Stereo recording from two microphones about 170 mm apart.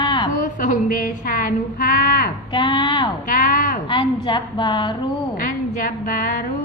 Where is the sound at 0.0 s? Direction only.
25° left (ahead or behind).